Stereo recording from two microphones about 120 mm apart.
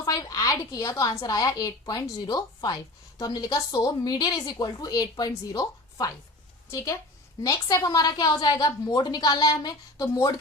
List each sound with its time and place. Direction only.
0.0 s a woman's voice: 30° left (ahead or behind)